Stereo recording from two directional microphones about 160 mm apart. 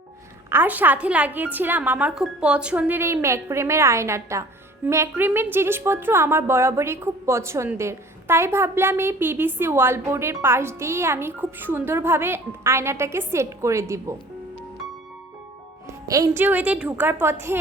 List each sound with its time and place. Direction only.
0.5 s a woman's voice: 10° right (ahead or behind)
15.9 s a woman's voice: 20° right (ahead or behind)